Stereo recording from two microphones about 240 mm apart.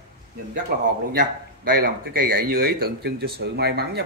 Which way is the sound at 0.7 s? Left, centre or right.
Right.